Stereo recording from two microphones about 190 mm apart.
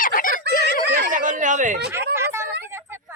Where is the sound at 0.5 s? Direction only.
60° right (ahead or behind).